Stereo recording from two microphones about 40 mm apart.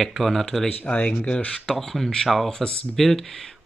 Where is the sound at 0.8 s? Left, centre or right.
Left.